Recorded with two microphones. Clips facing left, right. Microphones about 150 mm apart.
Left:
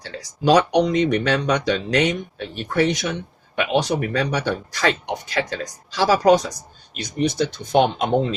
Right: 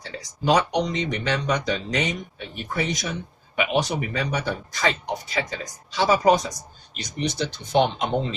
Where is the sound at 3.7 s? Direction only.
70° left (ahead or behind).